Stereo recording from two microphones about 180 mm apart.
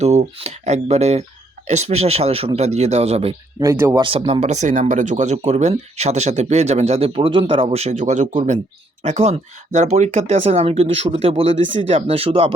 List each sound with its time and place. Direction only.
0.0 s speech: 35° right (ahead or behind)
3.6 s speech: 15° right (ahead or behind)
4.0 s speech: 35° right (ahead or behind)